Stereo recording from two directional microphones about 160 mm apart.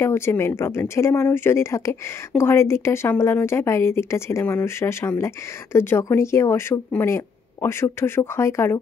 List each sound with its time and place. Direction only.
0.0 s speech: 15° left (ahead or behind)